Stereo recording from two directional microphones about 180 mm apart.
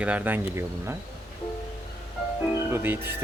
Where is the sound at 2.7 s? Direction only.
10° right (ahead or behind).